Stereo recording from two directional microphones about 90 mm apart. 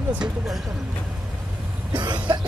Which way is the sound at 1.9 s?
55° right (ahead or behind).